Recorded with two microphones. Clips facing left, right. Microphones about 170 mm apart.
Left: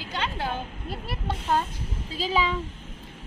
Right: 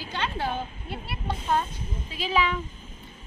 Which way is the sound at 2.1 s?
35° left (ahead or behind).